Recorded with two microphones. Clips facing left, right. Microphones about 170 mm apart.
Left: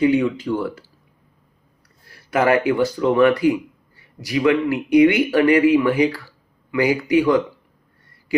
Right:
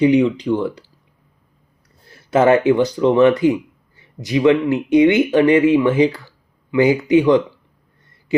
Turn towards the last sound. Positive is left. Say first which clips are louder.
# right 3 dB
turn(degrees=-20)  # may be behind; listen again after turning